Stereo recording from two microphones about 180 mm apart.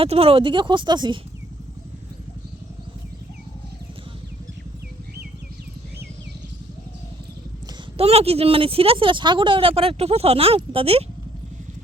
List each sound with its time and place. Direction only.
0.0 s speech: 30° right (ahead or behind)
7.9 s speech: 35° right (ahead or behind)